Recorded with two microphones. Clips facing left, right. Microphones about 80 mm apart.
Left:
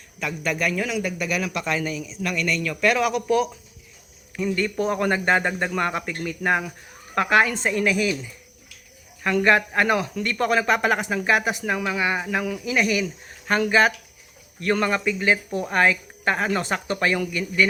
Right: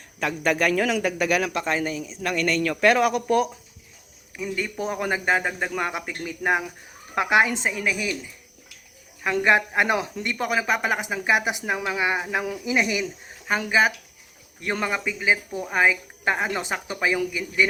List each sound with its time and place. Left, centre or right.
0.2 s a man's voice: right
1.5 s a man's voice: right
4.4 s speech: centre
7.7 s a woman's voice: centre
9.2 s speech: centre
10.3 s speech: centre
13.5 s speech: centre